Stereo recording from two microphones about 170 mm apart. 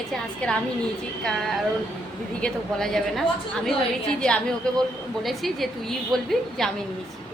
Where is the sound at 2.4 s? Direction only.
5° left (ahead or behind).